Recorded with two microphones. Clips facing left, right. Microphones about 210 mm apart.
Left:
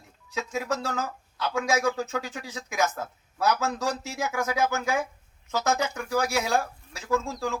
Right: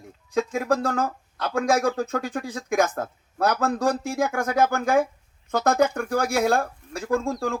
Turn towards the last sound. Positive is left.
turn(degrees=-55)  # may be behind; listen again after turning